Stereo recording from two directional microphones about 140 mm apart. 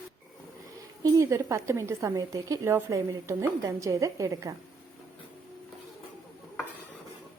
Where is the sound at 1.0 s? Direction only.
25° right (ahead or behind).